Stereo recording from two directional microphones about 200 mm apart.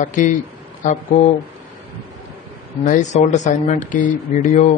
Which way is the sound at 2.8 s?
35° left (ahead or behind).